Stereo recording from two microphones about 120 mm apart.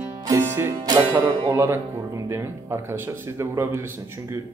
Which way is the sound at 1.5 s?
20° right (ahead or behind).